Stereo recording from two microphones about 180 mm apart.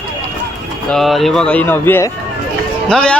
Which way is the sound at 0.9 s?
Centre (ahead or behind).